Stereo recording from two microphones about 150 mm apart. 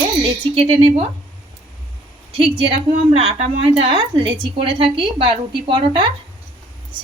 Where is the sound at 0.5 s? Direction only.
40° right (ahead or behind).